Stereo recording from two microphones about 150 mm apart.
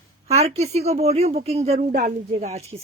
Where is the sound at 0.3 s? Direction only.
45° right (ahead or behind).